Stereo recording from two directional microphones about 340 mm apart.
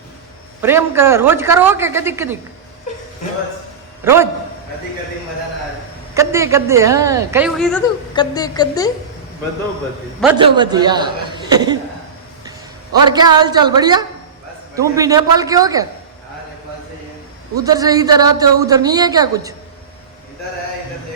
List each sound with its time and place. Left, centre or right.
0.6 s a woman's voice: centre
4.0 s a woman's voice: centre
6.1 s a woman's voice: centre
8.1 s a woman's voice: centre
10.3 s a woman's voice: centre
17.5 s a woman's voice: centre